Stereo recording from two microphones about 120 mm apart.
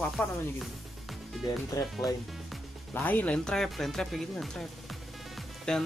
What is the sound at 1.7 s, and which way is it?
Speech, 25° left (ahead or behind).